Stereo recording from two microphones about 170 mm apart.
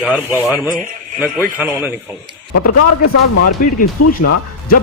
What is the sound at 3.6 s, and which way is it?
Speech, 55° left (ahead or behind).